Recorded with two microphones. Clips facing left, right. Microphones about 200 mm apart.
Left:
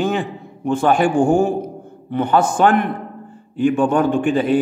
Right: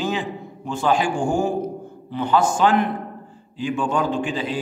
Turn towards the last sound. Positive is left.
turn(degrees=55)  # may be behind; listen again after turning